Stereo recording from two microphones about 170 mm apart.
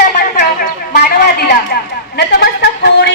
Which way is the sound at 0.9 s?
70° left (ahead or behind).